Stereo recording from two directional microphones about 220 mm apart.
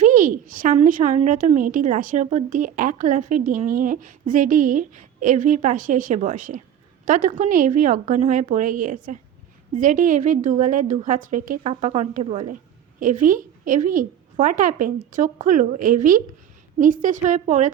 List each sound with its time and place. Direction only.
0.0 s a woman's voice: 35° right (ahead or behind)